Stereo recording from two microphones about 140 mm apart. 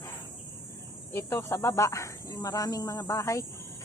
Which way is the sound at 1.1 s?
15° left (ahead or behind).